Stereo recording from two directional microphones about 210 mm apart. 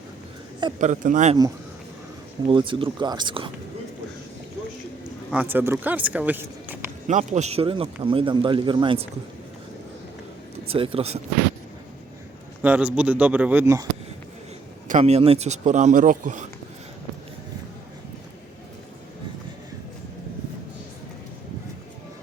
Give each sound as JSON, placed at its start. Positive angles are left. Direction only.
{"t": 0.8, "sound": "speech", "side_deg": -35}
{"t": 2.5, "sound": "speech", "side_deg": -25}
{"t": 5.3, "sound": "speech", "side_deg": -10}
{"t": 7.1, "sound": "speech", "side_deg": -35}
{"t": 10.7, "sound": "speech", "side_deg": -25}
{"t": 12.6, "sound": "speech", "side_deg": -5}
{"t": 14.8, "sound": "speech", "side_deg": -35}